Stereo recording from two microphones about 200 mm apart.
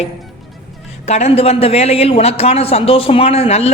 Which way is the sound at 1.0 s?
30° left (ahead or behind).